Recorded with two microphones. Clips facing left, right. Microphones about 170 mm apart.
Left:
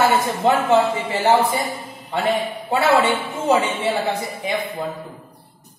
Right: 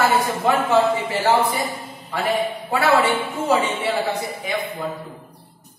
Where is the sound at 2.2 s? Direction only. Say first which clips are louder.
Even; 20° left (ahead or behind).